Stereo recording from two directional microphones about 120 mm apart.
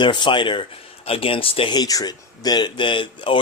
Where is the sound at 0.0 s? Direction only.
40° left (ahead or behind).